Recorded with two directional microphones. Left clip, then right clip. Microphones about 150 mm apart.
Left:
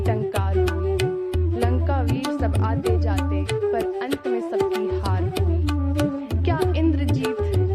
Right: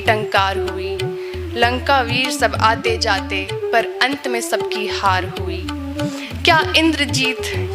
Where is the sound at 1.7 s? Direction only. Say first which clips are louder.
Right 10 dB; 10° right (ahead or behind).